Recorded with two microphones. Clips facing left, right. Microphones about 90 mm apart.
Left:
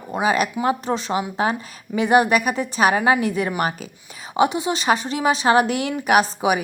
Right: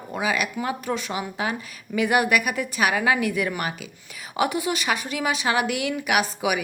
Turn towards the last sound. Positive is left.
turn(degrees=35)  # may be behind; listen again after turning